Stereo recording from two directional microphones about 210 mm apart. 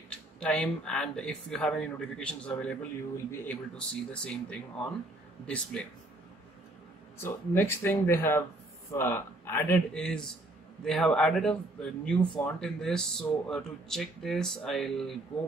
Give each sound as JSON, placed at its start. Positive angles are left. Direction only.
{"t": 0.4, "sound": "speech", "side_deg": 5}
{"t": 7.2, "sound": "speech", "side_deg": 10}